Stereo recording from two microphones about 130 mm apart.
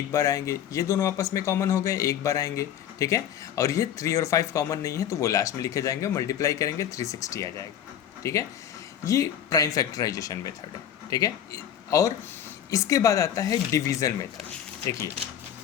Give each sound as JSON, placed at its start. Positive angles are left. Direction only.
{"t": 0.1, "sound": "speech", "side_deg": 25}